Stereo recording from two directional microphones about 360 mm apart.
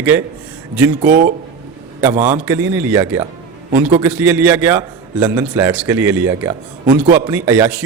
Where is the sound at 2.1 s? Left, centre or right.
Centre.